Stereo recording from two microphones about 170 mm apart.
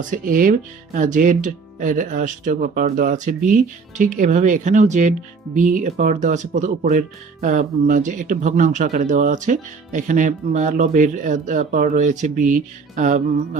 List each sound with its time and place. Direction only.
0.0 s speech: 50° right (ahead or behind)